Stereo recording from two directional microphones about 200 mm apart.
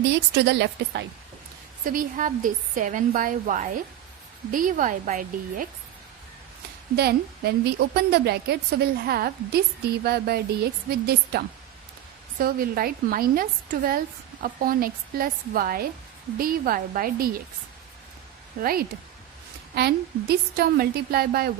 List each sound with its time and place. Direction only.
0.0 s a woman's voice: 60° right (ahead or behind)
1.8 s a woman's voice: 45° right (ahead or behind)
6.9 s a woman's voice: 55° right (ahead or behind)
18.6 s a woman's voice: 45° right (ahead or behind)